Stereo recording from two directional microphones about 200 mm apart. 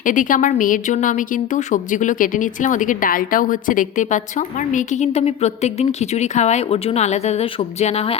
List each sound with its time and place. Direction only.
0.0 s a woman's voice: 40° left (ahead or behind)